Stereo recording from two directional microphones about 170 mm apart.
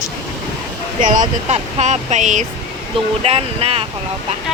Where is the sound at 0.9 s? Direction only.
50° right (ahead or behind).